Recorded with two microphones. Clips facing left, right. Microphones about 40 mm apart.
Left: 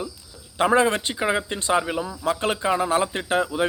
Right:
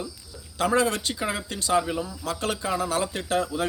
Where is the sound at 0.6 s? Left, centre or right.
Left.